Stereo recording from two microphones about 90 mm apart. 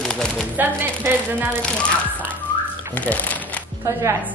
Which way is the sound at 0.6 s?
25° right (ahead or behind).